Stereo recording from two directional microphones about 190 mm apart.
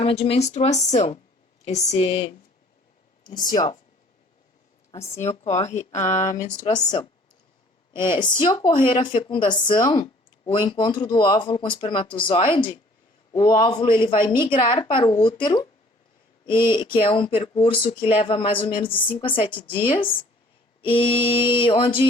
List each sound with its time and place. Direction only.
0.0 s speech: 30° left (ahead or behind)
3.2 s speech: 20° left (ahead or behind)
5.2 s speech: 35° left (ahead or behind)
6.7 s speech: 20° left (ahead or behind)
8.4 s speech: 25° left (ahead or behind)
16.6 s speech: 25° left (ahead or behind)